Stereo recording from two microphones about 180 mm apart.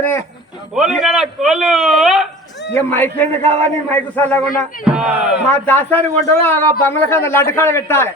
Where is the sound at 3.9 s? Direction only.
10° left (ahead or behind).